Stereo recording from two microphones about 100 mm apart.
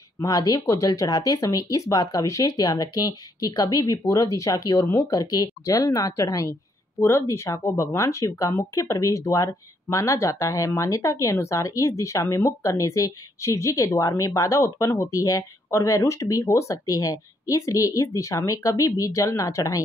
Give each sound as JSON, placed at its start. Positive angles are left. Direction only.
{"t": 0.2, "sound": "speech", "side_deg": 40}